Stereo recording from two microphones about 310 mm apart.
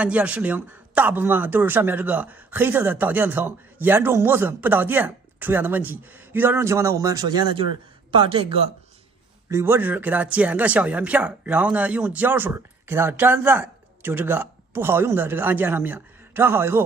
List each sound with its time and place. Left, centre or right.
0.0 s speech: centre
9.5 s speech: centre